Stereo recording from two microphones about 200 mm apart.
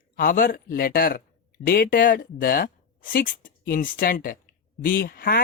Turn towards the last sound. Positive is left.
turn(degrees=50)  # may be behind; listen again after turning